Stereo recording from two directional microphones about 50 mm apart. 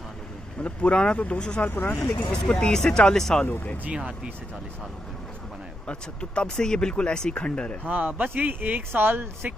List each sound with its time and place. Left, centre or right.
0.6 s speech: left
1.6 s speech: left
2.3 s speech: centre
3.4 s speech: left
3.8 s speech: right
5.9 s speech: centre
7.9 s speech: right